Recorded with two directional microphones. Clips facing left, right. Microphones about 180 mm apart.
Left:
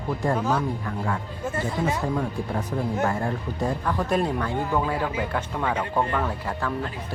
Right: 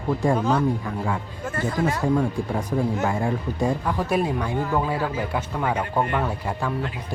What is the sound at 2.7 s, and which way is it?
Speech, 5° right (ahead or behind).